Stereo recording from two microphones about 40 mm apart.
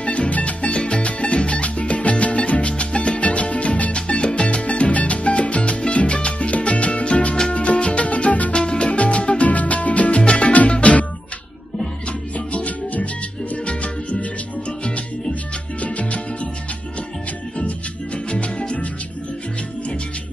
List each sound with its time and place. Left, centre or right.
0.0 s music: left
8.5 s music: left
12.4 s music: left
15.8 s music: left
17.6 s music: left